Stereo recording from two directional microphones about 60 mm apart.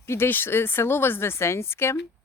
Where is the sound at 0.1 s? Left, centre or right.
Left.